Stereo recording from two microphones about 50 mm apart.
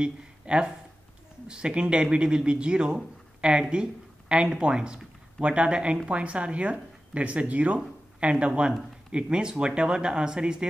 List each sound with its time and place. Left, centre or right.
0.0 s speech: centre